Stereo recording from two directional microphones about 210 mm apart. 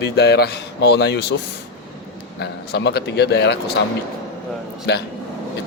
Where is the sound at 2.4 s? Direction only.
55° left (ahead or behind).